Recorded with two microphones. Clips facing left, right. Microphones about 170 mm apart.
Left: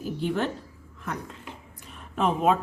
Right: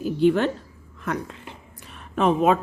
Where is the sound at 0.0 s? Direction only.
80° right.